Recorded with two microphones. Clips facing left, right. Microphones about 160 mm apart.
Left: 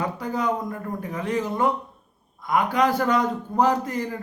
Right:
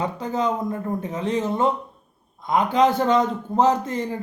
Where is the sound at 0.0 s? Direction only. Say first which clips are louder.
Right 2 dB; 20° right (ahead or behind).